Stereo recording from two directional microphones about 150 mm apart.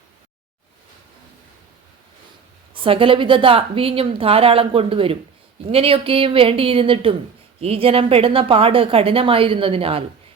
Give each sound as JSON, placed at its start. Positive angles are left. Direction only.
{"t": 2.8, "sound": "a woman's voice", "side_deg": -35}